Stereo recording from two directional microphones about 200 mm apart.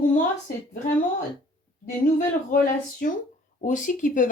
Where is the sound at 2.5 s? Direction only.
40° left (ahead or behind).